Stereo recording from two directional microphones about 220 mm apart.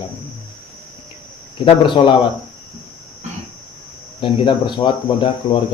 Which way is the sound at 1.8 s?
20° left (ahead or behind).